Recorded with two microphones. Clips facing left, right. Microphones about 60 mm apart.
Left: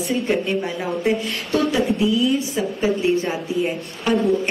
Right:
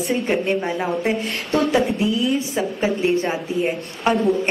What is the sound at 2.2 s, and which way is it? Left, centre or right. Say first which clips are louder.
A woman's voice: left 1 dB; right.